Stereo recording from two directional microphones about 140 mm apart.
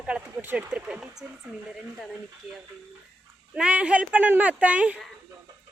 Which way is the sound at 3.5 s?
10° right (ahead or behind).